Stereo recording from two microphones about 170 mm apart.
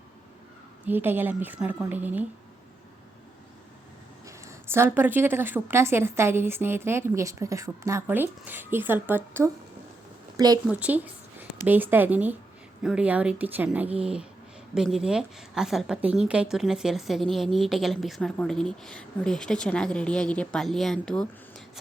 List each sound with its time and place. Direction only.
0.9 s a woman's voice: 10° right (ahead or behind)
4.3 s a woman's voice: 15° right (ahead or behind)
10.7 s a woman's voice: 10° right (ahead or behind)